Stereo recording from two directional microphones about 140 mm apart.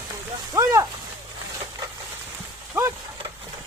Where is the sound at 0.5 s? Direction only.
20° right (ahead or behind).